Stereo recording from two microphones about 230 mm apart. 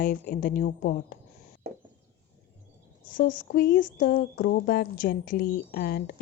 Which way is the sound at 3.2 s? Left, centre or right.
Left.